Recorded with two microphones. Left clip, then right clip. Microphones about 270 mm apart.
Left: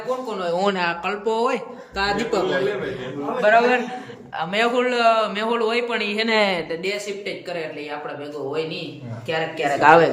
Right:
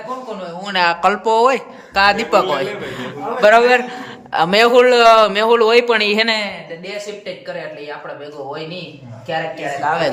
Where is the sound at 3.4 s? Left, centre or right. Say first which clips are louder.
Right 6 dB; right.